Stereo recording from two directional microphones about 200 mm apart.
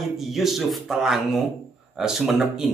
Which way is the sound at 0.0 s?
Centre (ahead or behind).